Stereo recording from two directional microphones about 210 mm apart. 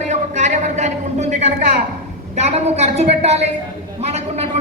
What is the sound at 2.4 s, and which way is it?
A woman's voice, 30° right (ahead or behind).